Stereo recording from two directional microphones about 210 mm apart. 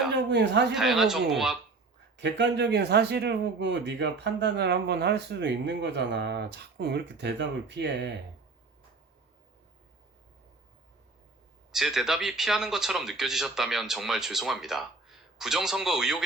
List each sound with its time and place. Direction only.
0.1 s a man's voice: 55° right (ahead or behind)
0.7 s speech: centre (ahead or behind)
2.1 s speech: 55° right (ahead or behind)
11.7 s speech: centre (ahead or behind)